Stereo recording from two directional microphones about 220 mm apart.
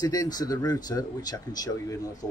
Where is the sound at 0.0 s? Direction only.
15° left (ahead or behind).